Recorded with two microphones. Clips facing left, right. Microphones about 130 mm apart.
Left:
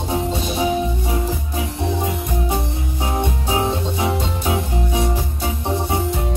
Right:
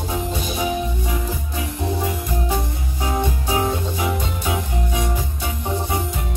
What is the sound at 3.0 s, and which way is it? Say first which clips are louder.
Music: even; 25° left (ahead or behind).